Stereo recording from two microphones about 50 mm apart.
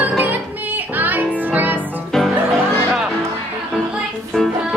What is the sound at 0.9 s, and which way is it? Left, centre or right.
Music, right.